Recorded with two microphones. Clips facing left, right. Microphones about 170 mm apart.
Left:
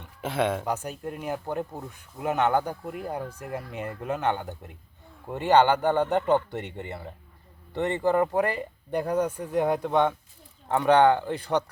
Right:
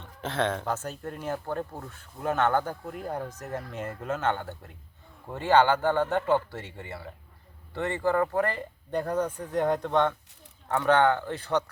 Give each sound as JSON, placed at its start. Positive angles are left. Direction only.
{"t": 0.0, "sound": "speech", "side_deg": 10}